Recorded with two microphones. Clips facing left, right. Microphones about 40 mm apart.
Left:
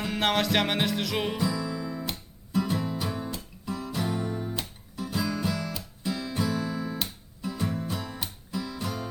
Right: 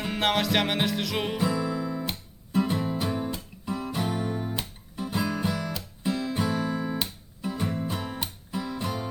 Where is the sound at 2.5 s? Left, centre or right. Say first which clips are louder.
Right 2 dB; right.